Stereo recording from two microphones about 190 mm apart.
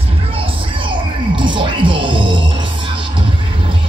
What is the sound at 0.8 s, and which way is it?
Music, 25° right (ahead or behind).